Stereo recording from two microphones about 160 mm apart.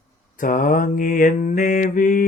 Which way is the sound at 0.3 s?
55° left (ahead or behind).